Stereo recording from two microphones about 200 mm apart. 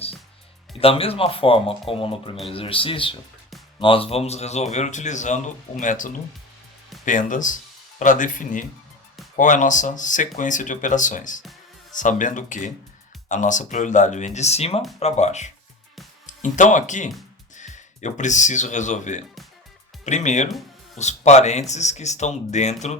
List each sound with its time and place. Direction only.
0.8 s speech: 30° left (ahead or behind)